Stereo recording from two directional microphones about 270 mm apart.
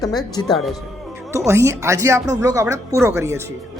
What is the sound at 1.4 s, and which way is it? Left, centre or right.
Speech, centre.